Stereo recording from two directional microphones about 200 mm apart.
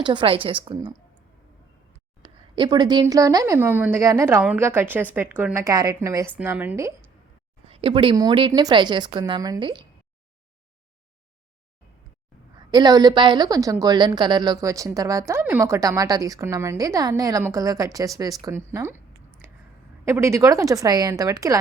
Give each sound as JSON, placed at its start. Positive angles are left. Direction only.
{"t": 0.0, "sound": "a woman's voice", "side_deg": -25}
{"t": 2.2, "sound": "a woman's voice", "side_deg": -20}
{"t": 7.7, "sound": "a woman's voice", "side_deg": -30}
{"t": 12.7, "sound": "a woman's voice", "side_deg": -20}
{"t": 20.1, "sound": "a woman's voice", "side_deg": -15}